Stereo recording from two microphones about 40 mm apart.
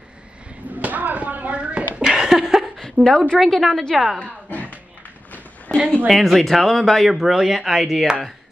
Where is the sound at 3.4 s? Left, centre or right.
Centre.